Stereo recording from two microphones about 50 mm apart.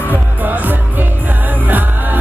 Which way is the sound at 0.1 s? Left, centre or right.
Right.